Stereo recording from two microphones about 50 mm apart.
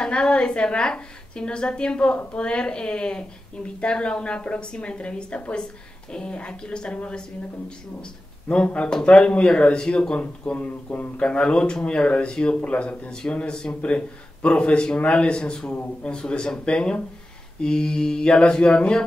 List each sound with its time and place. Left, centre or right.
0.0 s a woman's voice: centre; by 11.2 s left
11.2 s a woman's voice: left
13.3 s mantra: centre
13.7 s a woman's voice: left
15.0 s mantra: left
16.5 s a woman's voice: left
17.6 s mantra: centre